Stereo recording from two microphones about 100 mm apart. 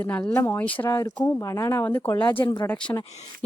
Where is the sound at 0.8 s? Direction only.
30° left (ahead or behind).